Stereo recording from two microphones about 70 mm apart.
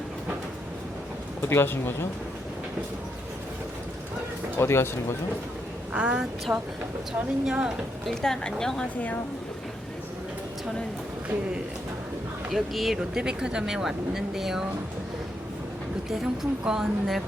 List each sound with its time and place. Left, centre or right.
1.4 s speech: left
4.5 s speech: left
5.9 s speech: centre
6.5 s speech: right
7.2 s speech: centre
8.0 s a woman's voice: centre
12.5 s a woman's voice: centre
16.0 s a woman's voice: centre